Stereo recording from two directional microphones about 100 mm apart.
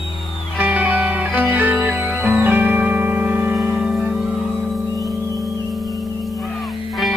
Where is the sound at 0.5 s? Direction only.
15° right (ahead or behind).